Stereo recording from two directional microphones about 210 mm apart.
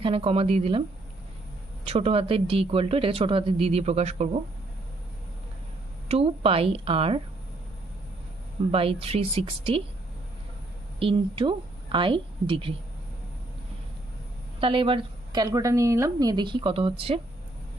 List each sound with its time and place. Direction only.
0.0 s speech: 25° right (ahead or behind)
1.9 s speech: 30° right (ahead or behind)
6.0 s speech: 30° right (ahead or behind)
8.7 s speech: 25° right (ahead or behind)
11.0 s a woman's voice: 25° right (ahead or behind)
14.6 s speech: 25° right (ahead or behind)